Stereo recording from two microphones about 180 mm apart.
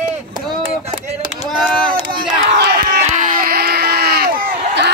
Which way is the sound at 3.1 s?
50° right (ahead or behind).